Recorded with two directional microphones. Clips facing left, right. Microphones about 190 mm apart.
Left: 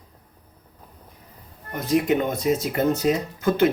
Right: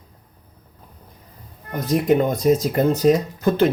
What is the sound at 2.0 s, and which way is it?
Speech, 40° right (ahead or behind).